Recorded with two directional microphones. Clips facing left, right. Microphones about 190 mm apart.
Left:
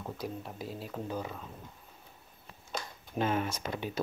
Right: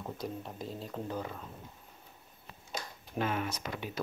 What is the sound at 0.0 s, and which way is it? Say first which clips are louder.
Speech: even; centre (ahead or behind).